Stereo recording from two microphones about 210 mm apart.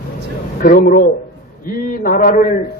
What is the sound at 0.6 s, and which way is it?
A man's voice, 40° left (ahead or behind).